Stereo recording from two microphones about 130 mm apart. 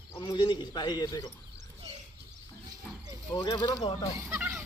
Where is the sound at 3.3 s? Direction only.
30° left (ahead or behind).